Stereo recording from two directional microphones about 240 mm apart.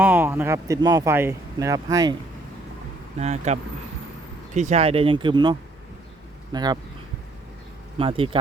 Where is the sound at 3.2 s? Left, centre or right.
Right.